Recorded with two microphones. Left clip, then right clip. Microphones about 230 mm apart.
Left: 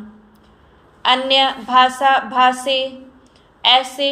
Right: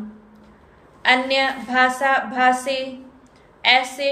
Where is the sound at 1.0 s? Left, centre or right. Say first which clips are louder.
Left 3 dB; centre.